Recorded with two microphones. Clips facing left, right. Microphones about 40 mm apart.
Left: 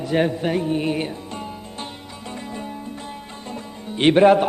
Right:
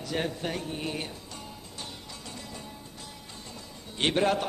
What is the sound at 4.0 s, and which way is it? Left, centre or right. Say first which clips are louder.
Speech: left 12 dB; left.